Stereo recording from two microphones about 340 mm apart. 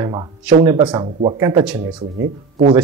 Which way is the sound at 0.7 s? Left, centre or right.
Centre.